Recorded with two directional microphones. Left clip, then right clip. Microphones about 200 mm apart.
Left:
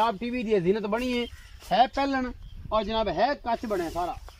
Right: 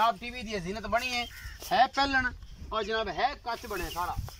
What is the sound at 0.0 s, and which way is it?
Speech, 30° left (ahead or behind).